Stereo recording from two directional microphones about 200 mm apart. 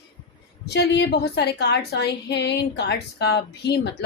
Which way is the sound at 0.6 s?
55° left (ahead or behind).